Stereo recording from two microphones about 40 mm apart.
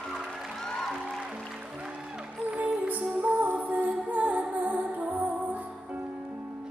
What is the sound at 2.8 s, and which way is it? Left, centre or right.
Music, right.